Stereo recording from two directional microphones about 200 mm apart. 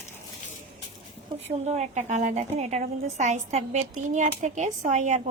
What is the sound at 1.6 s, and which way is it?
A woman's voice, 35° right (ahead or behind).